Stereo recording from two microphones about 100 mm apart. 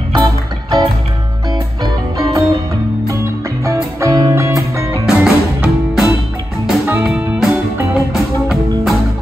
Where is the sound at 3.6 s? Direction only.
30° right (ahead or behind).